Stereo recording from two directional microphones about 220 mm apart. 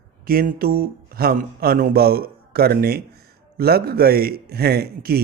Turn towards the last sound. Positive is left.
turn(degrees=-45)  # may be behind; listen again after turning